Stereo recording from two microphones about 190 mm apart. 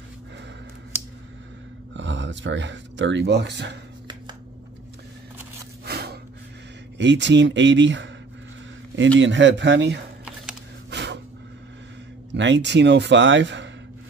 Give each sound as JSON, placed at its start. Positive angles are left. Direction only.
{"t": 2.0, "sound": "speech", "side_deg": -70}
{"t": 5.9, "sound": "gasp", "side_deg": -55}
{"t": 7.0, "sound": "a man's voice", "side_deg": -70}
{"t": 10.9, "sound": "snort", "side_deg": -65}
{"t": 12.3, "sound": "a man's voice", "side_deg": -70}